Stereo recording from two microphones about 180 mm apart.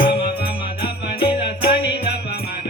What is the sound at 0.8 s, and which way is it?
Music, 30° left (ahead or behind).